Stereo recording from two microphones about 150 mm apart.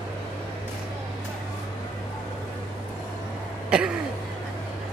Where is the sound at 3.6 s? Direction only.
5° right (ahead or behind).